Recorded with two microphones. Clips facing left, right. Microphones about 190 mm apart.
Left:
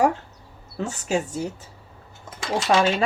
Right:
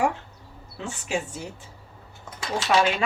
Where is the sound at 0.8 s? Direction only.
40° left (ahead or behind).